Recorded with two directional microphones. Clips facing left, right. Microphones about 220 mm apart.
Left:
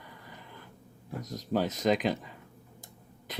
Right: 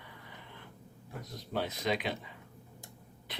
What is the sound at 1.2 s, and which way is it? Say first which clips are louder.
Speech: left 6 dB; 45° left (ahead or behind).